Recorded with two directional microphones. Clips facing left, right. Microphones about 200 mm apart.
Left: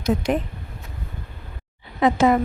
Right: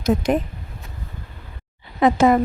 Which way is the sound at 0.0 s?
45° right (ahead or behind).